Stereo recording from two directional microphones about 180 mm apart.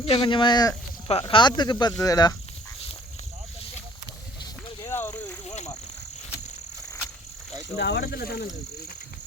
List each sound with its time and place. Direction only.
0.0 s speech: 30° left (ahead or behind)
4.8 s a sound: 15° left (ahead or behind)
7.8 s speech: 65° left (ahead or behind)